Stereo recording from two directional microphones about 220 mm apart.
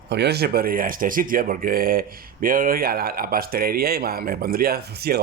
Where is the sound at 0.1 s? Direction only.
50° right (ahead or behind).